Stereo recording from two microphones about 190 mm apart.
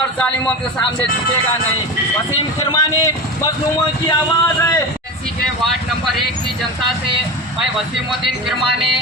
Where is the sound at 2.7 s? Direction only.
15° left (ahead or behind).